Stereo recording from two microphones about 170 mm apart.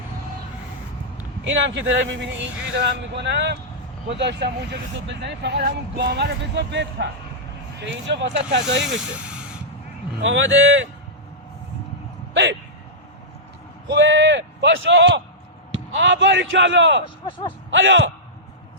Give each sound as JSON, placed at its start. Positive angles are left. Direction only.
{"t": 1.5, "sound": "speech", "side_deg": -90}
{"t": 8.8, "sound": "speech", "side_deg": -5}
{"t": 10.2, "sound": "speech", "side_deg": -90}
{"t": 12.3, "sound": "speech", "side_deg": -90}
{"t": 13.9, "sound": "speech", "side_deg": -90}
{"t": 17.2, "sound": "speech", "side_deg": 30}
{"t": 17.7, "sound": "speech", "side_deg": -90}